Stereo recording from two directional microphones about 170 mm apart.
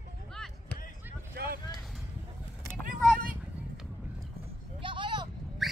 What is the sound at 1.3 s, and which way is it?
Vehicle, 65° right (ahead or behind).